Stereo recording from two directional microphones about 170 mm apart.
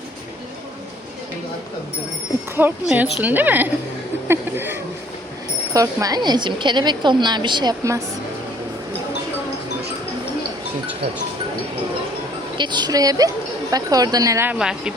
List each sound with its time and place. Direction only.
2.6 s a woman's voice: 10° right (ahead or behind)
12.5 s a woman's voice: 25° right (ahead or behind); by 14.9 s 5° right (ahead or behind)